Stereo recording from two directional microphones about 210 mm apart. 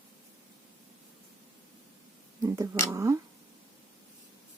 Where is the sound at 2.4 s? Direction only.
15° right (ahead or behind).